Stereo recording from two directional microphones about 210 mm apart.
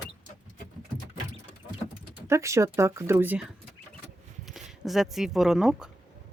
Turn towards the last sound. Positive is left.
turn(degrees=0)  # may be behind; listen again after turning